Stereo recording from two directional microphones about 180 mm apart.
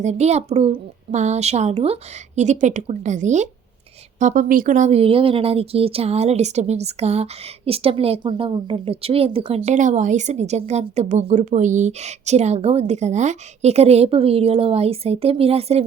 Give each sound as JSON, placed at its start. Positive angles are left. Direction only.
{"t": 0.0, "sound": "speech", "side_deg": -40}